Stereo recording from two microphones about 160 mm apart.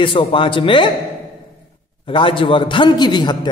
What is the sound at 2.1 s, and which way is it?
Speech, 30° left (ahead or behind).